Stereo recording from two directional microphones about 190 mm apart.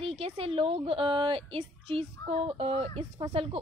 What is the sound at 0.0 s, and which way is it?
A woman's voice, 30° right (ahead or behind).